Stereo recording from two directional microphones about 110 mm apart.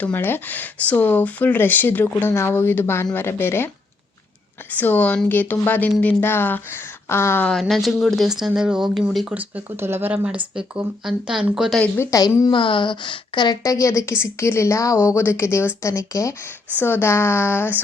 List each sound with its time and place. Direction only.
0.0 s a woman's voice: 15° left (ahead or behind)
4.7 s a woman's voice: 15° left (ahead or behind)
7.6 s speech: centre (ahead or behind)
12.1 s speech: 30° left (ahead or behind)
12.5 s a woman's voice: 50° left (ahead or behind)
13.6 s a woman's voice: 30° left (ahead or behind)